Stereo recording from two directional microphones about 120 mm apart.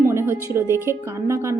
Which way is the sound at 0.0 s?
20° right (ahead or behind).